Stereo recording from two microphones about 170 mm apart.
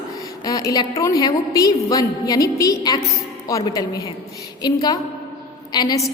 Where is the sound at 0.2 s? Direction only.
20° left (ahead or behind).